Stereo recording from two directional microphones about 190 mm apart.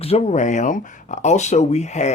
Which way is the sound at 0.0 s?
35° left (ahead or behind).